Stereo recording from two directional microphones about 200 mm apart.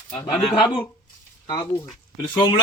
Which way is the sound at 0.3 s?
25° left (ahead or behind).